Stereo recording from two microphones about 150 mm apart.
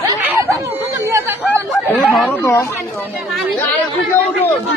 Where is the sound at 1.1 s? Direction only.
10° right (ahead or behind).